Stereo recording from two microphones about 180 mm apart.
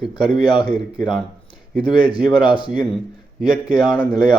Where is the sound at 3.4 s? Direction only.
5° right (ahead or behind).